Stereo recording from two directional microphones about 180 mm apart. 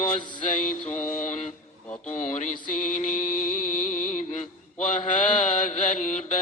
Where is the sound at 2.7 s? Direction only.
45° left (ahead or behind).